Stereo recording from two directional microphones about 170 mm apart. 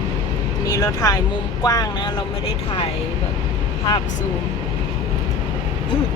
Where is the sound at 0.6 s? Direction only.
20° left (ahead or behind).